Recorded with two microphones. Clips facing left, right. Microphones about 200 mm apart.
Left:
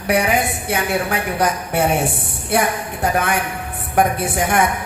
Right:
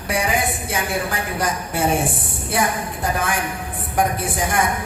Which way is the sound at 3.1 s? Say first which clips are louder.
Left 2 dB; 65° left (ahead or behind).